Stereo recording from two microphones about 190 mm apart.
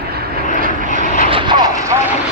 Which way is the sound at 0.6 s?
40° right (ahead or behind).